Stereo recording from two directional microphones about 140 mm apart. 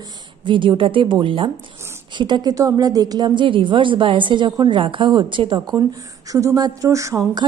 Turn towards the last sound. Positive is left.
turn(degrees=-20)  # may be behind; listen again after turning